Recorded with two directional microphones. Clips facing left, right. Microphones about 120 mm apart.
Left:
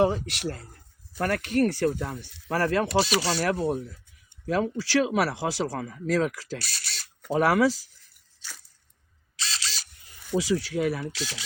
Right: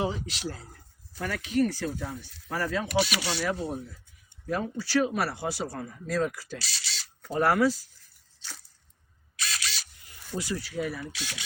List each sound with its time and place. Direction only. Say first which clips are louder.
0.0 s speech: left 7 dB; 60° left (ahead or behind)
2.9 s speech: left 4 dB; 30° left (ahead or behind)
3.5 s speech: left 5 dB; 75° left (ahead or behind)
4.4 s speech: left 5 dB; 90° left
6.6 s camera: left 1 dB; 55° left (ahead or behind)
7.3 s speech: left 2 dB; 90° left
9.3 s camera: even; 25° left (ahead or behind)
10.3 s speech: left 7 dB; 90° left